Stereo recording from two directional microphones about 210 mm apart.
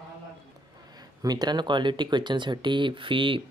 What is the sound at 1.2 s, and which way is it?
Speech, 20° right (ahead or behind).